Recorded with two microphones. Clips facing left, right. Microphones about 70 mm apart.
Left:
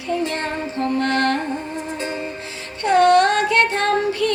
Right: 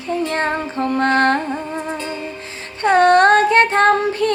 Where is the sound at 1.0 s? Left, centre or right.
Right.